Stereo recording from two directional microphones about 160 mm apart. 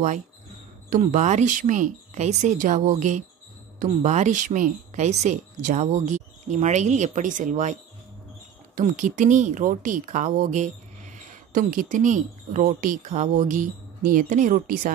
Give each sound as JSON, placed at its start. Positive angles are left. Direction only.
{"t": 0.8, "sound": "speech", "side_deg": -55}
{"t": 8.7, "sound": "speech", "side_deg": -55}